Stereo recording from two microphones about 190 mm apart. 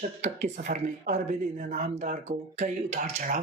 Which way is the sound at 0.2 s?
40° right (ahead or behind).